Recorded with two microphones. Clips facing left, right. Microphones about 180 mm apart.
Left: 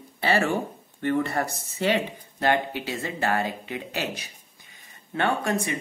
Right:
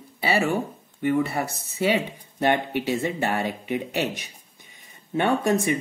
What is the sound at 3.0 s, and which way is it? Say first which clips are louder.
Speech: right 1 dB; 20° right (ahead or behind).